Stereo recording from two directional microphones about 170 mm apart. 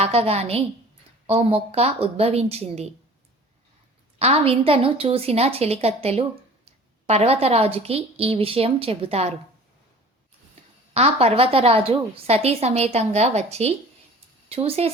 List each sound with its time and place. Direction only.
0.0 s a woman's voice: 35° right (ahead or behind)
4.2 s a woman's voice: 35° right (ahead or behind)
10.9 s a woman's voice: 40° right (ahead or behind)